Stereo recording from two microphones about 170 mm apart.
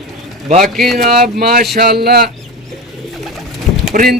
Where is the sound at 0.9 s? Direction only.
60° right (ahead or behind).